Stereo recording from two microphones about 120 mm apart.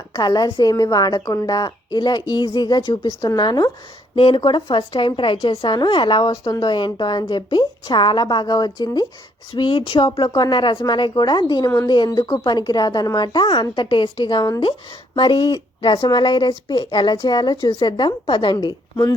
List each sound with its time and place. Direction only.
0.2 s a woman's voice: 35° left (ahead or behind)
4.1 s a woman's voice: 45° left (ahead or behind)
9.6 s a woman's voice: 50° left (ahead or behind)
10.2 s a woman's voice: 35° left (ahead or behind)
14.6 s a woman's voice: 45° left (ahead or behind)